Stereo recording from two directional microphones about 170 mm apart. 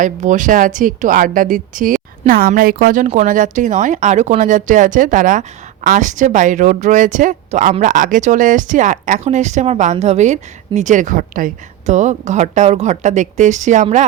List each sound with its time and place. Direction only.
0.0 s speech: 50° right (ahead or behind)